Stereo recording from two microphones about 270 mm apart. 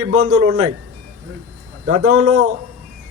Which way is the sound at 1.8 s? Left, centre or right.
Right.